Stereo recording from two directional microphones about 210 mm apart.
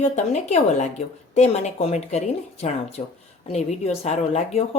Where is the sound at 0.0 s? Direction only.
35° left (ahead or behind).